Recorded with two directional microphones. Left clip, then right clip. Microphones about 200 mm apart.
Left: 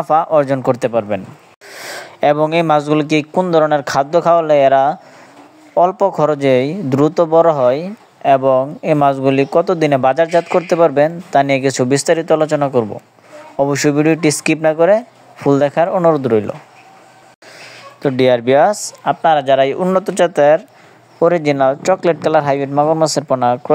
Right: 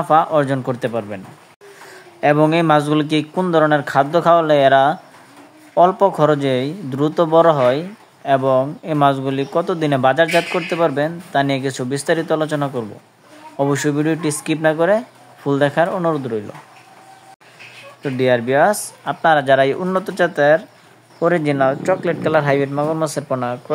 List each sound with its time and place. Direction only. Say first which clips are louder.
0.0 s speech: left 2 dB; 30° left (ahead or behind)
18.0 s speech: left 4 dB; 40° left (ahead or behind)
19.0 s speech: left 2 dB; 15° left (ahead or behind); by 23.6 s 35° left (ahead or behind)